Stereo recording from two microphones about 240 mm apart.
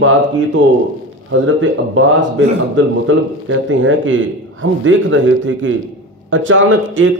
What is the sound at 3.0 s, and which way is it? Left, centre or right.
A man's voice, right.